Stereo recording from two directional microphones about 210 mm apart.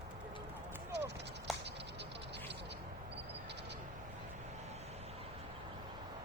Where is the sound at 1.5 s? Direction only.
Centre (ahead or behind).